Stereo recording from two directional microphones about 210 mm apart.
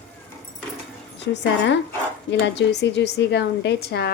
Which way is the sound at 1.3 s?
55° left (ahead or behind).